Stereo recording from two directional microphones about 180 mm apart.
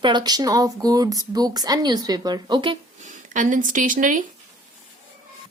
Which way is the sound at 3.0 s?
45° right (ahead or behind).